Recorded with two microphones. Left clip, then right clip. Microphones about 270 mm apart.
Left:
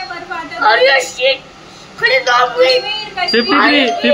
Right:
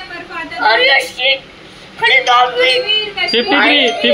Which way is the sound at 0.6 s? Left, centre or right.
Centre.